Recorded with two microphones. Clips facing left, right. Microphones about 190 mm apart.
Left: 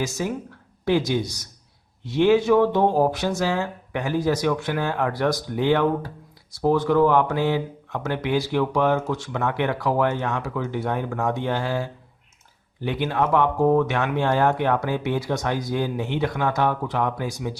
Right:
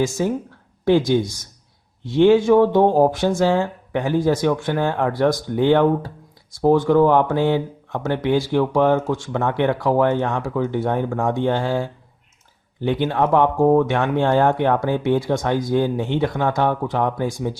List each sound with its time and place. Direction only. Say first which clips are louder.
0.0 s speech: right 6 dB; 50° right (ahead or behind)
13.1 s speech: right 3 dB; 50° right (ahead or behind)